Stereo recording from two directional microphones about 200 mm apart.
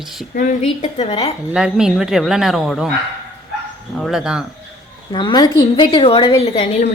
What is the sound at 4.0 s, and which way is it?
Speech, centre (ahead or behind).